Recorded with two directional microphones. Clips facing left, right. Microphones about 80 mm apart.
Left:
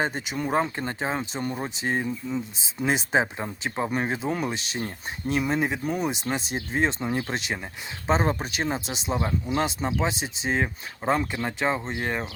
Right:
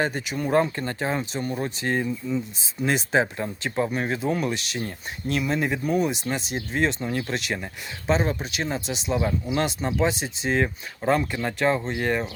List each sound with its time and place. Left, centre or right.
0.0 s speech: left
1.2 s speech: left
1.5 s speech: centre
3.8 s speech: left